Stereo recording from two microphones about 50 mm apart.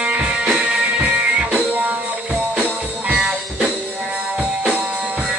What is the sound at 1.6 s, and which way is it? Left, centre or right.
Music, right.